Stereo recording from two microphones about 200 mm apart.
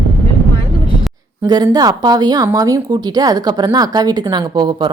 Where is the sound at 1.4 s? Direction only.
15° right (ahead or behind).